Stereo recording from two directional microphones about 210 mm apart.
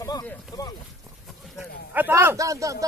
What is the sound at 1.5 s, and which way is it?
Speech, 10° right (ahead or behind).